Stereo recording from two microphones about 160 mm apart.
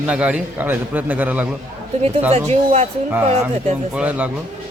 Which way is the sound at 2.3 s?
40° right (ahead or behind).